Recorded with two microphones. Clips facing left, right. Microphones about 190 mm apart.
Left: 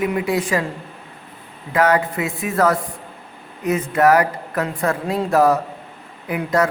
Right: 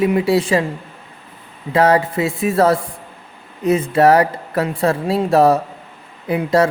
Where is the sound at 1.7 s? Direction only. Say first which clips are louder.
Right 3 dB; 30° right (ahead or behind).